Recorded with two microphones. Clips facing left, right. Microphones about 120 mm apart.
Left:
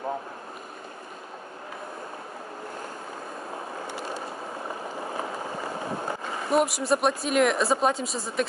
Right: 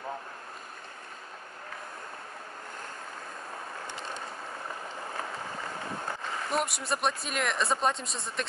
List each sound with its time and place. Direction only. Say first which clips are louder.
3.8 s ratchet: left 5 dB; 10° left (ahead or behind)
4.8 s boat: left 5 dB; 15° left (ahead or behind)
6.5 s speech: left 9 dB; centre (ahead or behind)